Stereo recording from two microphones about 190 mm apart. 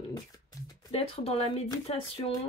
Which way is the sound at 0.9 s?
30° left (ahead or behind).